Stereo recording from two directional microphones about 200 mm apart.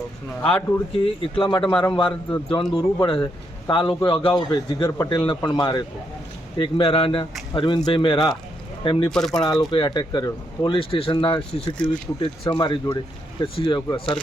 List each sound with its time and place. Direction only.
1.4 s speech: 25° left (ahead or behind)
9.1 s speech: centre (ahead or behind)
9.4 s speech: 20° left (ahead or behind)